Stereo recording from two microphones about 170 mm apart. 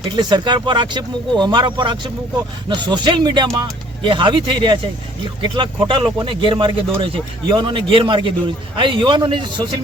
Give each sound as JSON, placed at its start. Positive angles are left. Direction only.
{"t": 0.2, "sound": "speech", "side_deg": -25}